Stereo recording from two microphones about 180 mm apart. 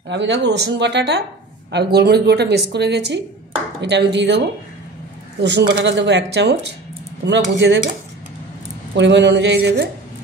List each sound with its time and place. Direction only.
0.1 s a woman's voice: 80° right
5.4 s a woman's voice: 70° right (ahead or behind)
8.9 s a woman's voice: 75° right (ahead or behind)